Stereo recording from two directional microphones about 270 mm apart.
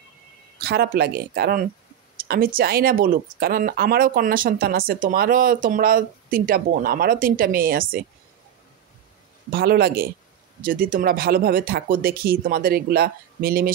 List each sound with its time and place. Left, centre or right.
0.6 s speech: right
9.5 s speech: right